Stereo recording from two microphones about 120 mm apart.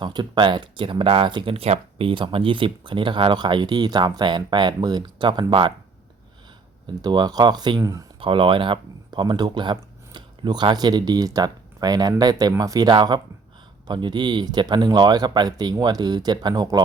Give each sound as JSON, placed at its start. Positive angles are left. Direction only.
{"t": 0.0, "sound": "speech", "side_deg": -40}
{"t": 6.8, "sound": "speech", "side_deg": -40}
{"t": 8.2, "sound": "speech", "side_deg": -45}